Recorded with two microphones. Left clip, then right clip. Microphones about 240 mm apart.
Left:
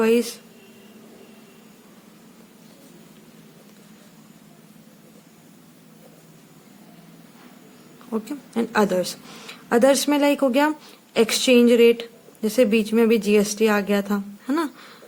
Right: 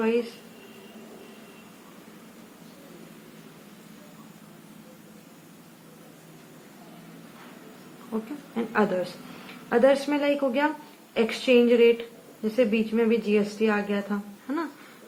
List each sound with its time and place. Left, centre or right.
0.0 s speech: left
8.1 s speech: left